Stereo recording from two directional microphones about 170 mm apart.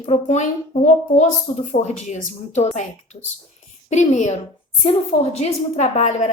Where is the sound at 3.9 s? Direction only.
45° left (ahead or behind).